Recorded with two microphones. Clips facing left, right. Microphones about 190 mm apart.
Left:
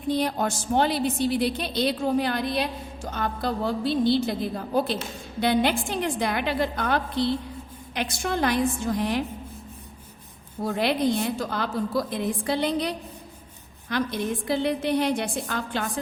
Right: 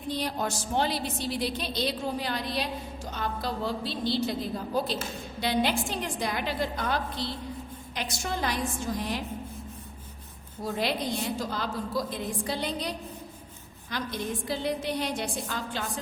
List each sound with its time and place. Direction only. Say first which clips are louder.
0.1 s a woman's voice: left 6 dB; 55° left (ahead or behind)
10.6 s a woman's voice: left 6 dB; 60° left (ahead or behind)
13.9 s a woman's voice: left 6 dB; 60° left (ahead or behind)